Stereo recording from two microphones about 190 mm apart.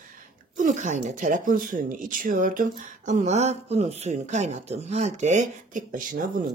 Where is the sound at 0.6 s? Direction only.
40° right (ahead or behind).